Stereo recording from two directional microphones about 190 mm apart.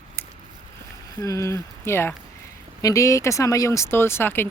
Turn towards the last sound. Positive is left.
turn(degrees=10)  # may be behind; listen again after turning